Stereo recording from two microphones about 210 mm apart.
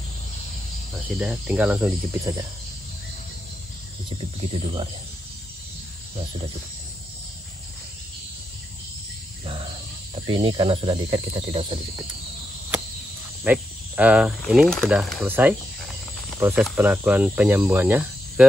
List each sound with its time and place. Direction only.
1.0 s speech: 5° right (ahead or behind)
10.2 s speech: 25° right (ahead or behind)
13.4 s speech: 5° right (ahead or behind)